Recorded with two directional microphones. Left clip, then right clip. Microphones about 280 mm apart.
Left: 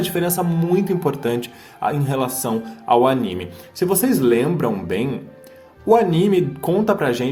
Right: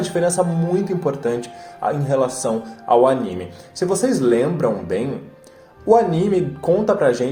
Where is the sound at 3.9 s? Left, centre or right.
Left.